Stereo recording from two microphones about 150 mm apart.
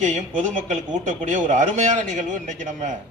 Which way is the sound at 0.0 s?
55° right (ahead or behind).